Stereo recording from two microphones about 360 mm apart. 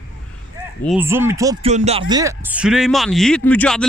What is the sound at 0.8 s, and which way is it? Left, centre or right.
A man's voice, centre.